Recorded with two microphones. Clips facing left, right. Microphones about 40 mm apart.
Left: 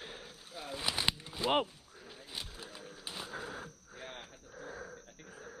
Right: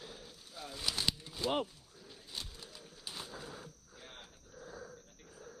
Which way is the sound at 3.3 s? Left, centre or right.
Left.